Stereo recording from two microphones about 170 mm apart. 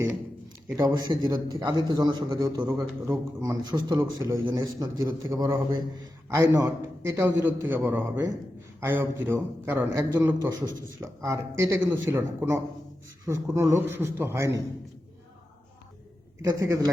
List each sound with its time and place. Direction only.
0.8 s a man's voice: 20° right (ahead or behind)
16.4 s a man's voice: 20° right (ahead or behind)